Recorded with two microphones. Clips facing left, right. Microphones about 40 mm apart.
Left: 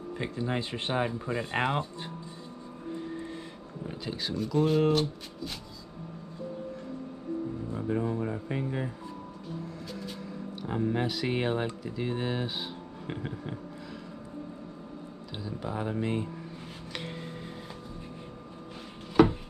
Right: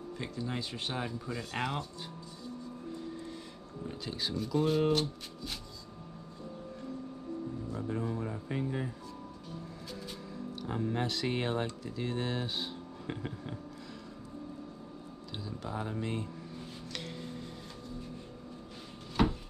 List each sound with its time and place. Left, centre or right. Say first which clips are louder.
0.2 s speech: left 6 dB; left
2.9 s vehicle: left 7 dB; left
4.0 s speech: left 3 dB; centre
7.7 s speech: left 6 dB; left
9.9 s music: left 4 dB; centre
10.7 s speech: left 4 dB; centre
15.3 s speech: left 4 dB; centre
16.9 s a sound: left 4 dB; left
19.2 s a sound: left 8 dB; centre